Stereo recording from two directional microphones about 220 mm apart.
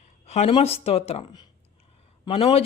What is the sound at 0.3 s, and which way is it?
Speech, 30° left (ahead or behind).